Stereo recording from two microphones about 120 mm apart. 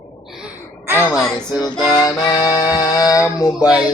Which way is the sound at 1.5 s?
35° left (ahead or behind).